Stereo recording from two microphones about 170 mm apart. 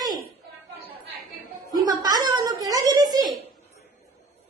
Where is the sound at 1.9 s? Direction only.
25° right (ahead or behind).